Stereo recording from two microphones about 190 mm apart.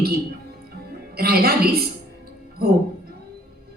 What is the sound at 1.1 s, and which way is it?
Speech, 55° right (ahead or behind).